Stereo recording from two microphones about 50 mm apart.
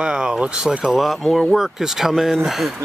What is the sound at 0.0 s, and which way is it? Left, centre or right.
Speech, centre.